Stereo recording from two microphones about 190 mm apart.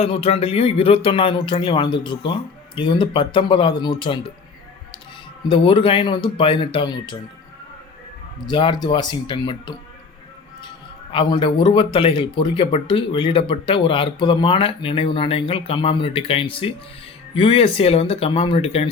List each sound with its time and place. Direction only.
0.0 s speech: 30° left (ahead or behind)
5.5 s speech: 25° left (ahead or behind)
8.4 s speech: 25° left (ahead or behind)
11.1 s speech: 25° left (ahead or behind)